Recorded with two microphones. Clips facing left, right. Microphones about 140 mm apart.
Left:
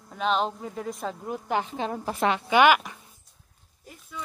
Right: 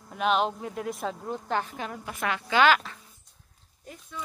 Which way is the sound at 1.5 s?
20° left (ahead or behind).